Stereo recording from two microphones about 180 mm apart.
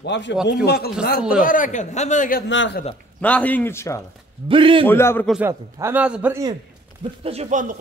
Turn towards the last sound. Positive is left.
turn(degrees=-45)  # may be behind; listen again after turning